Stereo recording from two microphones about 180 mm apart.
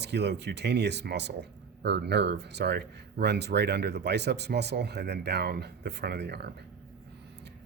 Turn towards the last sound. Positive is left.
turn(degrees=-65)  # may be behind; listen again after turning